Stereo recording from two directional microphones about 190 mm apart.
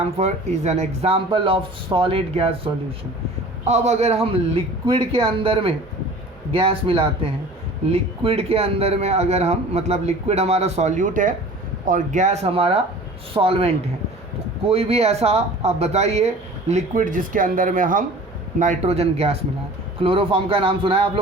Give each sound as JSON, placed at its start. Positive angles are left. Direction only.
{"t": 0.0, "sound": "a man's voice", "side_deg": -35}
{"t": 3.7, "sound": "a man's voice", "side_deg": -35}